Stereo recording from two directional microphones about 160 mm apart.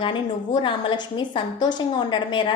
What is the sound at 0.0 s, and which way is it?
A woman's voice, 30° left (ahead or behind).